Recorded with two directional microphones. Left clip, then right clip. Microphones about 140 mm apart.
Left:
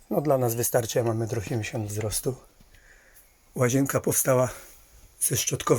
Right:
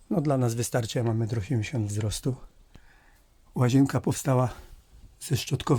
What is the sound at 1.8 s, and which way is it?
Speech, 40° right (ahead or behind).